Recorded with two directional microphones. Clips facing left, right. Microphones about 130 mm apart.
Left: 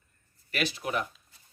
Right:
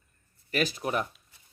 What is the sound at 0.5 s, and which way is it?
Speech, 40° right (ahead or behind).